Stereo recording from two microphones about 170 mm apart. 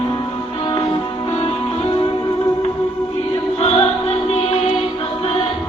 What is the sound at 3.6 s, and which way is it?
Music, 35° left (ahead or behind).